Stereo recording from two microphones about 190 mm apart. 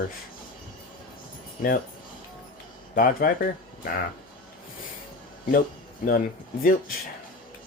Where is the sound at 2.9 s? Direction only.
45° left (ahead or behind).